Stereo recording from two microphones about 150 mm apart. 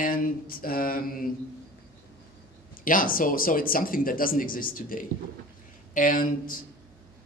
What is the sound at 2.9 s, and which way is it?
Speech, 70° left (ahead or behind).